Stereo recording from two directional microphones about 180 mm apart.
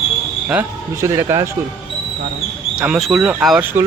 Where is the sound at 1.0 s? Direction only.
15° right (ahead or behind).